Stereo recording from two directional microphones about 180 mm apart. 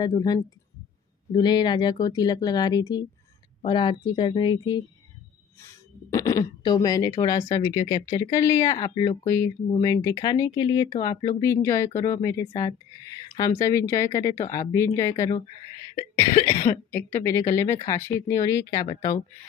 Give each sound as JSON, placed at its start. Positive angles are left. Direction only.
{"t": 0.0, "sound": "speech", "side_deg": 20}